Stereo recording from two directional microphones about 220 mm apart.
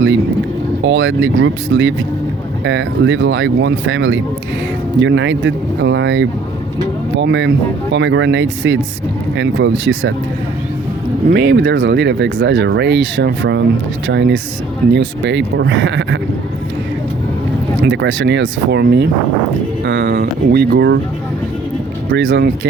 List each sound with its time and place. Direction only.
0.9 s speech: 55° right (ahead or behind)
11.3 s speech: 50° right (ahead or behind)
17.8 s speech: 55° right (ahead or behind)
22.1 s speech: 55° right (ahead or behind)